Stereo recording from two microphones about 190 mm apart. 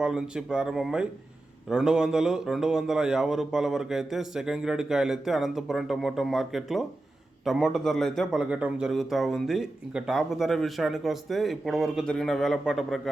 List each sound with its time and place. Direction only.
0.0 s a man's voice: 5° right (ahead or behind)